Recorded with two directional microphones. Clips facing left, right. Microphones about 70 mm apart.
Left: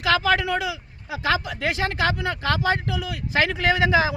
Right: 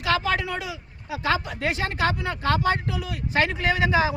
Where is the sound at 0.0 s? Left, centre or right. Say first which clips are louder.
Left 3 dB; left.